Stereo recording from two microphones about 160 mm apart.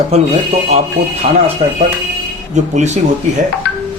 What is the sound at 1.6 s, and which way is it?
A man's voice, 40° right (ahead or behind).